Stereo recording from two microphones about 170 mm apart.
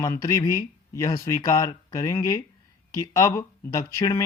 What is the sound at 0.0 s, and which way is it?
Speech, 15° left (ahead or behind).